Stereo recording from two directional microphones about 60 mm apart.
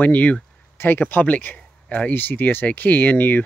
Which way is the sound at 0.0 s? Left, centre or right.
Left.